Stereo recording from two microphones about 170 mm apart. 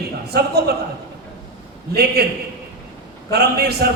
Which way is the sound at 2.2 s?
70° right (ahead or behind).